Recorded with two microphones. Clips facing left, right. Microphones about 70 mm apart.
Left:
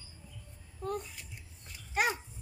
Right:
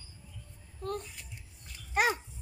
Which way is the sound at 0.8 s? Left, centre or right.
Centre.